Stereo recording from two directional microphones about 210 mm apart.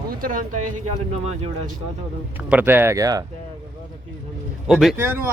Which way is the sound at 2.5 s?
10° right (ahead or behind).